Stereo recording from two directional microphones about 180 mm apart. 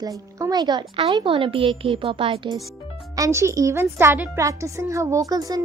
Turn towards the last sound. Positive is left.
turn(degrees=-20)  # may be behind; listen again after turning